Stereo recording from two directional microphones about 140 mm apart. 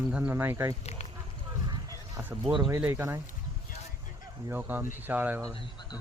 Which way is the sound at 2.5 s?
35° right (ahead or behind).